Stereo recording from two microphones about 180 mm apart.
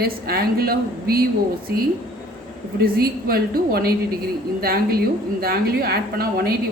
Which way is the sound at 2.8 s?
55° right (ahead or behind).